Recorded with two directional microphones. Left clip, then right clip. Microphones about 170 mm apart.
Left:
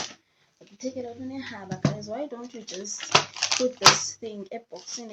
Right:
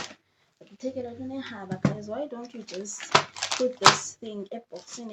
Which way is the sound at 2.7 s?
25° right (ahead or behind).